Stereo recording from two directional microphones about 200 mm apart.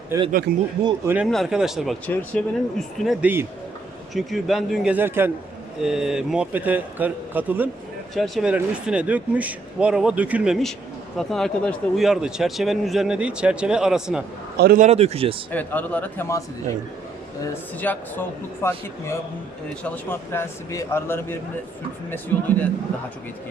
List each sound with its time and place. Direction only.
0.3 s a man's voice: 45° right (ahead or behind)
1.0 s a man's voice: 5° right (ahead or behind)
14.5 s a man's voice: 50° right (ahead or behind)
14.8 s a man's voice: 30° right (ahead or behind)
15.5 s speech: 10° left (ahead or behind)
17.5 s speech: 10° left (ahead or behind)